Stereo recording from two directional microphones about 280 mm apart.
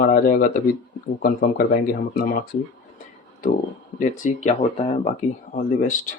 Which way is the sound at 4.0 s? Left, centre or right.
Left.